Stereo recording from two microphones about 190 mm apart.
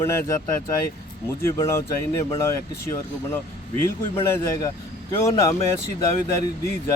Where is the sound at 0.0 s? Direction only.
15° left (ahead or behind).